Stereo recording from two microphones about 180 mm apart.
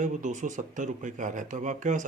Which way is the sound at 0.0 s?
45° right (ahead or behind).